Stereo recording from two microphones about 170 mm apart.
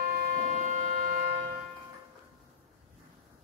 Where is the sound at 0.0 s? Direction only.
60° right (ahead or behind).